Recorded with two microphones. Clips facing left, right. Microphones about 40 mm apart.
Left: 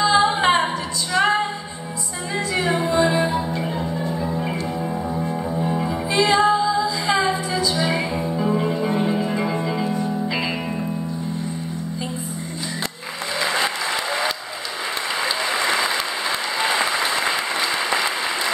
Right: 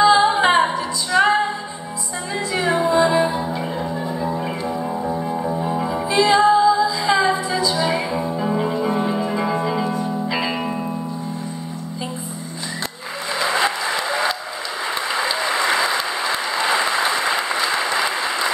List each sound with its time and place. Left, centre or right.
0.2 s music: centre
13.5 s applause: centre